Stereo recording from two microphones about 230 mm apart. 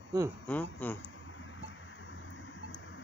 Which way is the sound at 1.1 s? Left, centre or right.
Left.